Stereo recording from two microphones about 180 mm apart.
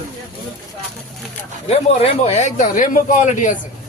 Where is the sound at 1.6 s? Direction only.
35° left (ahead or behind).